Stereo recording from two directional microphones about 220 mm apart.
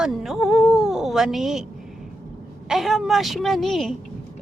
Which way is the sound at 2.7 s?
Centre (ahead or behind).